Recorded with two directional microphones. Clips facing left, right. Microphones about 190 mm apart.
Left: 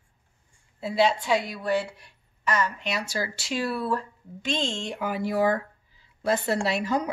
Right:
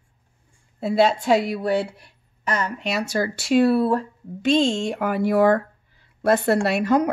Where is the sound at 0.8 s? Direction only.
55° right (ahead or behind).